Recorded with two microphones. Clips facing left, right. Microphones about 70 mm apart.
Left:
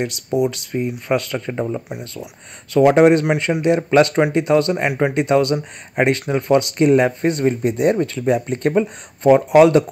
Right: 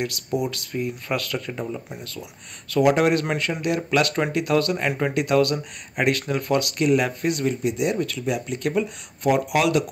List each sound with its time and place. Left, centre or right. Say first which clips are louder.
0.0 s speech: left 6 dB; left